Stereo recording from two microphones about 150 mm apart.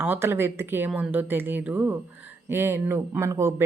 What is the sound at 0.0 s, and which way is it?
Speech, 15° right (ahead or behind).